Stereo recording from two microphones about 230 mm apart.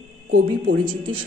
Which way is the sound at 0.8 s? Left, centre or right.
Right.